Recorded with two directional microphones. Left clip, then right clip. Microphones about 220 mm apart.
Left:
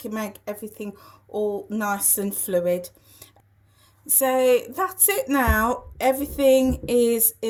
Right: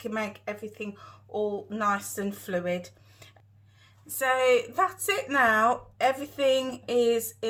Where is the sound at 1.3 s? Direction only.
50° left (ahead or behind).